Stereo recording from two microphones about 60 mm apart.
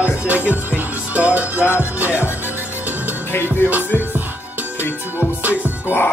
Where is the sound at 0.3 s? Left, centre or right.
Right.